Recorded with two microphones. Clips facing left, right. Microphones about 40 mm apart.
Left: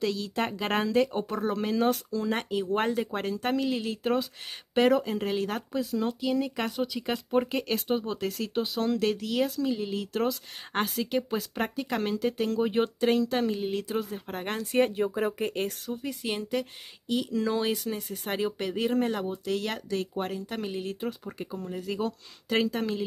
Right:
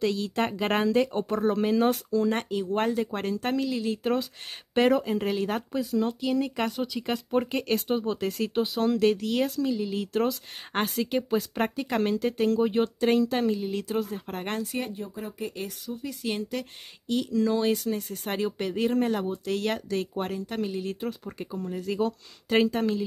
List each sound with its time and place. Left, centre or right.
0.0 s speech: centre
1.6 s speech: centre
2.6 s speech: centre
9.7 s speech: centre
9.9 s speech: centre
13.0 s speech: centre
15.5 s speech: left
16.5 s speech: centre
18.2 s speech: centre
20.6 s speech: centre